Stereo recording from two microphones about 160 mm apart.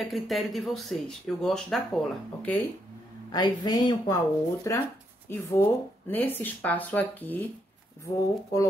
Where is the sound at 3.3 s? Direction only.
25° left (ahead or behind).